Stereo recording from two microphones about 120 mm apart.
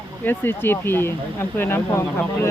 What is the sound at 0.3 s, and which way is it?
Speech, 15° left (ahead or behind).